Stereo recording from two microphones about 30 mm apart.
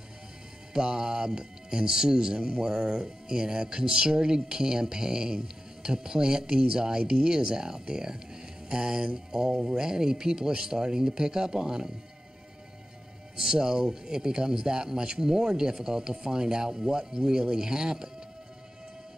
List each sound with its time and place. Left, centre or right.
0.7 s speech: right
13.4 s speech: centre